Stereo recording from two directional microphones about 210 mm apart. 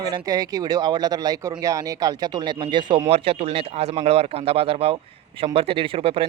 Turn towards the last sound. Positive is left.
turn(degrees=-25)  # may be behind; listen again after turning